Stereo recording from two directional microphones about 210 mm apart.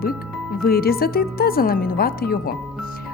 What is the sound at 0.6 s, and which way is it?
A woman's voice, 45° left (ahead or behind).